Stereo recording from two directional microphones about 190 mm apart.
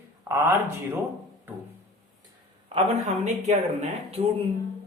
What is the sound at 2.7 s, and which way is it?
Speech, 35° right (ahead or behind).